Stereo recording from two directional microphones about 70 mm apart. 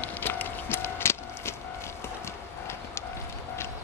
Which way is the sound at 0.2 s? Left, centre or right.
Left.